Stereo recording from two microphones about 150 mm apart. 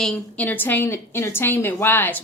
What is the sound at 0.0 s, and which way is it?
A woman's voice, 5° left (ahead or behind).